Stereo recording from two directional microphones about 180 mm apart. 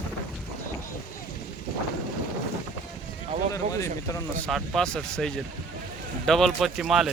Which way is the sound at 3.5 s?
15° left (ahead or behind).